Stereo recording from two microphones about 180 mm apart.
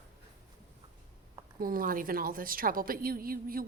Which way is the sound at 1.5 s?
50° right (ahead or behind).